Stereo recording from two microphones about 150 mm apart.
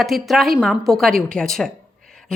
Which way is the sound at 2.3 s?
5° left (ahead or behind).